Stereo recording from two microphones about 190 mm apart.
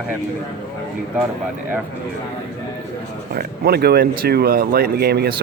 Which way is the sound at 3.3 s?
55° right (ahead or behind).